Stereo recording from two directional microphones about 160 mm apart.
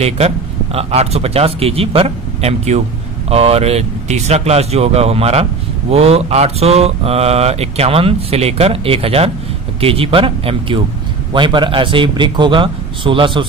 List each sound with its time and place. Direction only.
0.7 s speech: 40° right (ahead or behind)